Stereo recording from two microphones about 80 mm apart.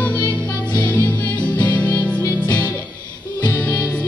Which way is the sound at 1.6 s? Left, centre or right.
Centre.